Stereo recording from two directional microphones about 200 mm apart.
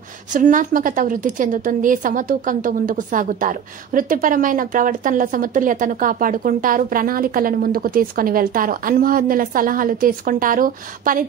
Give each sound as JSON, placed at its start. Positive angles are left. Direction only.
{"t": 0.3, "sound": "a woman's voice", "side_deg": -40}